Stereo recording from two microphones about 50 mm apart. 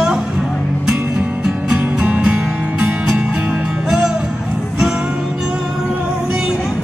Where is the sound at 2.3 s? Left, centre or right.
Centre.